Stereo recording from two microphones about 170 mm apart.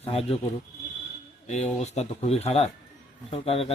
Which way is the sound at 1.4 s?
40° left (ahead or behind).